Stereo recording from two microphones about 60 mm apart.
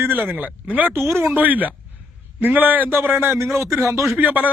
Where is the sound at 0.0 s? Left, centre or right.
Right.